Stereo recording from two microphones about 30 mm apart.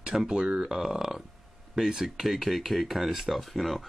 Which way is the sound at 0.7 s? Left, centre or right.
Centre.